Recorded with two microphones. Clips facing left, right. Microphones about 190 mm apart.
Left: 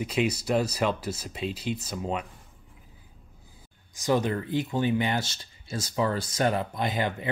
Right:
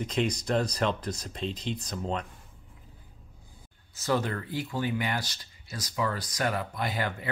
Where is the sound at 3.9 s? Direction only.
15° left (ahead or behind).